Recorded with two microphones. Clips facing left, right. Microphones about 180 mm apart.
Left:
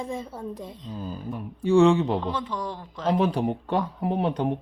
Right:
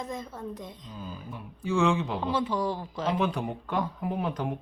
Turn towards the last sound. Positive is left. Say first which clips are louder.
# left 6 dB
turn(degrees=30)  # may be behind; listen again after turning